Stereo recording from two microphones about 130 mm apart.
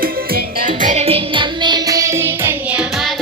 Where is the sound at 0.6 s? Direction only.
80° right.